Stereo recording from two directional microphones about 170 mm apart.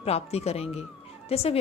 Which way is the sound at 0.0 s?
40° left (ahead or behind).